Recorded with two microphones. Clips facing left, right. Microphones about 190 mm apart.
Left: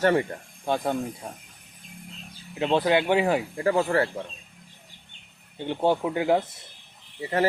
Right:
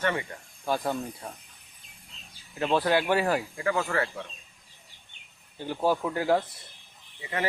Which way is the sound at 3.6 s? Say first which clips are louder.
Left 5 dB; 35° left (ahead or behind).